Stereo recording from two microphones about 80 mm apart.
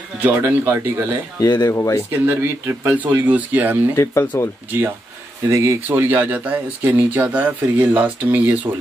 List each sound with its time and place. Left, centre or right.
0.2 s speech: right
1.4 s speech: left
1.7 s speech: left
2.1 s speech: right
3.9 s speech: left
5.5 s speech: right
5.9 s speech: right